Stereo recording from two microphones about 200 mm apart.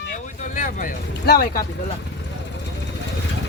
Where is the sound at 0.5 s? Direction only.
40° left (ahead or behind).